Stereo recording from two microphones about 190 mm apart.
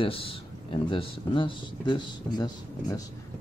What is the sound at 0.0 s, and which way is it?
Speech, 30° left (ahead or behind).